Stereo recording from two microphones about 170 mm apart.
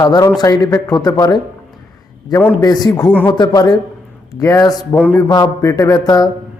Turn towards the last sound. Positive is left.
turn(degrees=25)  # may be behind; listen again after turning